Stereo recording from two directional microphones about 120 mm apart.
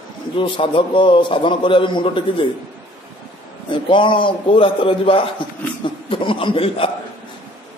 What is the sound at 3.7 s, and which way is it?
A man's voice, 45° left (ahead or behind).